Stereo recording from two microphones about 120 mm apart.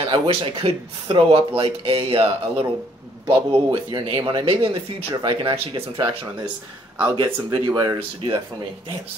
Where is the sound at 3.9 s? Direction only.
40° right (ahead or behind).